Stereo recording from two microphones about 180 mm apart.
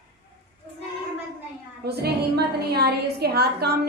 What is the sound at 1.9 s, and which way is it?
A woman's voice, 60° right (ahead or behind).